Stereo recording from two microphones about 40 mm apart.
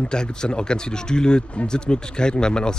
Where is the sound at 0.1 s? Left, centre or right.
Left.